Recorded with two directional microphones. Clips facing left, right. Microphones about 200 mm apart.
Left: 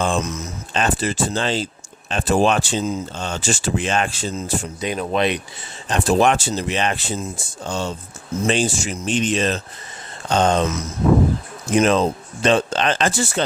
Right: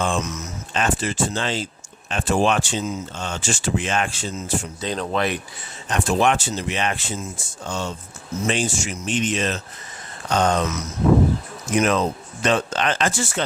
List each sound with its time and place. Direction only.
0.0 s speech: 35° left (ahead or behind)
4.8 s speech: 15° left (ahead or behind)
5.9 s speech: 35° left (ahead or behind)